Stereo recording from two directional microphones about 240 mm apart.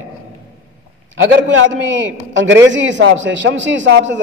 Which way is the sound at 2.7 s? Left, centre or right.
Right.